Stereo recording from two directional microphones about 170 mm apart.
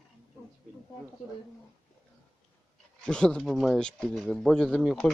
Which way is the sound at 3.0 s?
5° left (ahead or behind).